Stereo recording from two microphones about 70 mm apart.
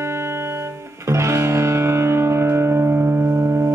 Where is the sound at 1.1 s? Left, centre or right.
Right.